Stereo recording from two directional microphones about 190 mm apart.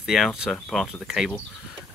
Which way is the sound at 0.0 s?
Centre (ahead or behind).